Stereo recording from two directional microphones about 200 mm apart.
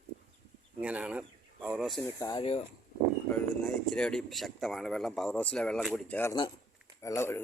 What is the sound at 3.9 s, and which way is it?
Speech, 5° left (ahead or behind).